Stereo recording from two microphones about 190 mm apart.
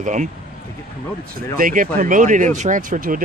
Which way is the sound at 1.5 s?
45° right (ahead or behind).